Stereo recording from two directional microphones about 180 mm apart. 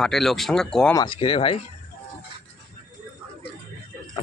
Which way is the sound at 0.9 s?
25° left (ahead or behind).